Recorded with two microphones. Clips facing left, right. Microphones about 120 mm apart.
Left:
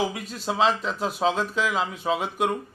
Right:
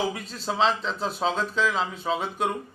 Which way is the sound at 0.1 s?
10° left (ahead or behind).